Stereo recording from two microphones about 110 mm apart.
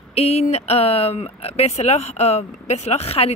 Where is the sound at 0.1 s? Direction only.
70° left (ahead or behind).